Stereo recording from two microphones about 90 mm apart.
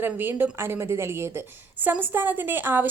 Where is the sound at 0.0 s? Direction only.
25° right (ahead or behind).